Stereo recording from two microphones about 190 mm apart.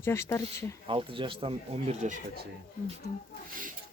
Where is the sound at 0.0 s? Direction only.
15° left (ahead or behind).